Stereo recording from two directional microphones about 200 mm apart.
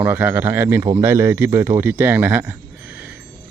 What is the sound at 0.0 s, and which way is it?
Speech, 10° right (ahead or behind).